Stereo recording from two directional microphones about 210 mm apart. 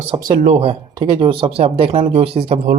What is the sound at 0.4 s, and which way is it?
Speech, 30° right (ahead or behind).